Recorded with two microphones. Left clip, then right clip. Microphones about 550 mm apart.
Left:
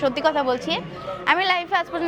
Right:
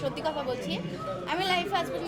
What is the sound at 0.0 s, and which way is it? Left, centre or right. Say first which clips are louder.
A woman's voice: left 10 dB; left.